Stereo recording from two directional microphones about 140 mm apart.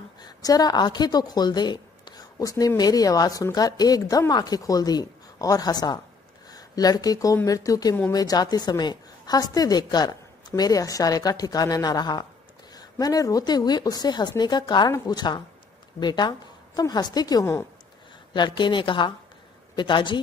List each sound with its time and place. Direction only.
0.2 s a woman's voice: 25° left (ahead or behind)